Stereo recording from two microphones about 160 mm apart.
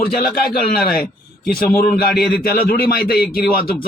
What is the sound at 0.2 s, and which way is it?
A man's voice, 70° left (ahead or behind).